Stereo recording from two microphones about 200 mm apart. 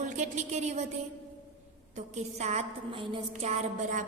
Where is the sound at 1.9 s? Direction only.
35° right (ahead or behind).